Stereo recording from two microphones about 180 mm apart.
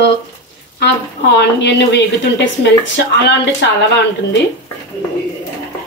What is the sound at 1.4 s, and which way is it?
Speech, 70° left (ahead or behind).